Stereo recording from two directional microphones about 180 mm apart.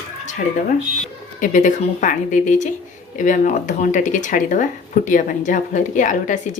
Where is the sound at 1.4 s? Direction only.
45° left (ahead or behind).